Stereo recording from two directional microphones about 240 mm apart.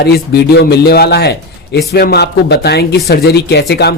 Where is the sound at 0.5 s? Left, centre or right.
Left.